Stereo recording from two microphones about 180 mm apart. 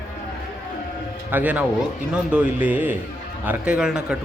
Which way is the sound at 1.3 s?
10° right (ahead or behind).